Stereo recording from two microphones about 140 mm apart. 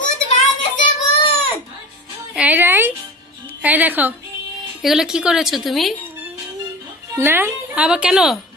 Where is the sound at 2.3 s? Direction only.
10° right (ahead or behind).